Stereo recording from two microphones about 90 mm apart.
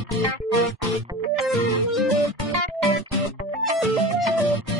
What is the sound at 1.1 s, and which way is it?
Music, 35° right (ahead or behind).